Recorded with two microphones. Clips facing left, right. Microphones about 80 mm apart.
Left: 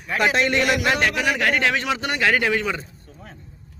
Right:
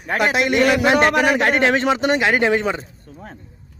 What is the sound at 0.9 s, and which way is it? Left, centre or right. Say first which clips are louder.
Speech: right 6 dB; right.